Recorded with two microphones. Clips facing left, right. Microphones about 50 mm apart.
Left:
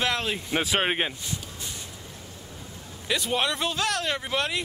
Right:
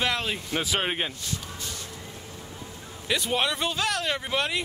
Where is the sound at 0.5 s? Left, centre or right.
Centre.